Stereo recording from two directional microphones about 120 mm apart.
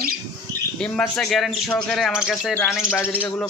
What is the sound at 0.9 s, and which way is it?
Speech, centre (ahead or behind).